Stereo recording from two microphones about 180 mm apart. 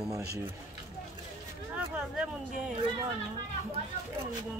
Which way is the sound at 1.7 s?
5° right (ahead or behind).